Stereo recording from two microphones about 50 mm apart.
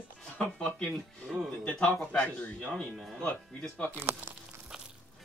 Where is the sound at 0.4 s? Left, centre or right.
Left.